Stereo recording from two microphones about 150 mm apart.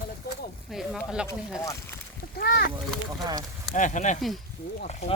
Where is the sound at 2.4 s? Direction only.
90° left.